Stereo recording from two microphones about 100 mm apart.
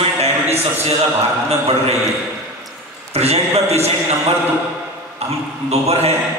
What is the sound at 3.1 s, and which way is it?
A man's voice, 90° right.